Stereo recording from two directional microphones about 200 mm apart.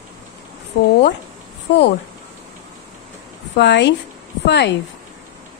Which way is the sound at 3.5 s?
60° left (ahead or behind).